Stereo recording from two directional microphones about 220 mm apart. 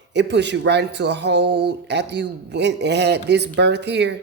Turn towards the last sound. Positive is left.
turn(degrees=-50)  # may be behind; listen again after turning